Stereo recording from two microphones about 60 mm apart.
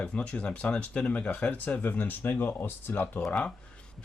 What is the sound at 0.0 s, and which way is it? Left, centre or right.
Speech, left.